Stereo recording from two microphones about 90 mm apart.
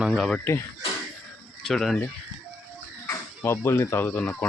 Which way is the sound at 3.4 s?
30° left (ahead or behind).